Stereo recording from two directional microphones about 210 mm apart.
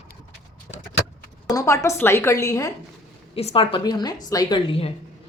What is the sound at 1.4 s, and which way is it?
A woman's voice, 15° left (ahead or behind).